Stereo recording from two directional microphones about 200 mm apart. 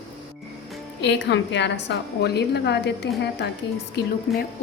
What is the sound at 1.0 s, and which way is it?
A woman's voice, 60° left (ahead or behind).